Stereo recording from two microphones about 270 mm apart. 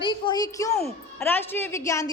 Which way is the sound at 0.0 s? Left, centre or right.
Centre.